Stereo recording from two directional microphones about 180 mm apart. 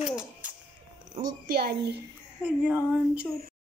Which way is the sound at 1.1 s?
50° right (ahead or behind).